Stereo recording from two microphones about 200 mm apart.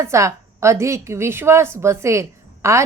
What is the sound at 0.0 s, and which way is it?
A woman's voice, 15° right (ahead or behind).